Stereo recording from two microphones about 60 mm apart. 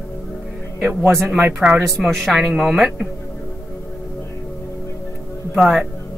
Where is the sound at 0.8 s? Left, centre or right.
Right.